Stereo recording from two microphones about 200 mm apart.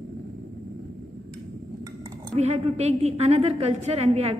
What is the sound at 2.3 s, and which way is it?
A woman's voice, 35° right (ahead or behind).